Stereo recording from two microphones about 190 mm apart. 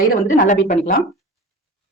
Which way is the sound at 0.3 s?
40° left (ahead or behind).